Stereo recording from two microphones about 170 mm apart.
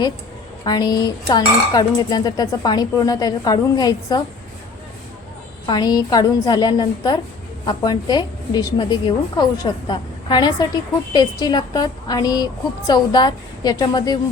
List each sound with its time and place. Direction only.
0.6 s dishes: 25° left (ahead or behind)
5.6 s dishes: 25° left (ahead or behind)